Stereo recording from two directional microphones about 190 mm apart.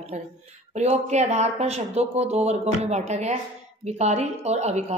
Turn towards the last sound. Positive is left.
turn(degrees=-35)  # may be behind; listen again after turning